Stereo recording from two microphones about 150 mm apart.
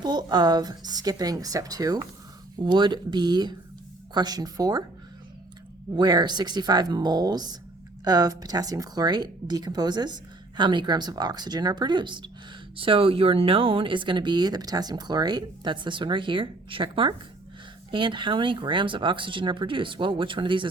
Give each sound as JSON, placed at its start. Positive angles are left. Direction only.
{"t": 0.0, "sound": "speech", "side_deg": -25}
{"t": 5.9, "sound": "speech", "side_deg": -25}